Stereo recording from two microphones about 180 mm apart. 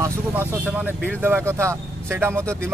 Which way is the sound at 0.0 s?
10° right (ahead or behind).